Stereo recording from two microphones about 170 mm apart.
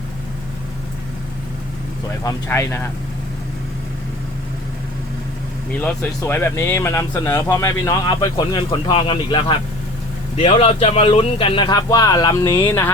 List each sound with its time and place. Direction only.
2.2 s speech: 15° left (ahead or behind)
6.2 s a man's voice: 10° left (ahead or behind)